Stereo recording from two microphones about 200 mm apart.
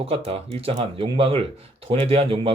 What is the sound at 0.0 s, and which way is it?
Speech, 30° right (ahead or behind).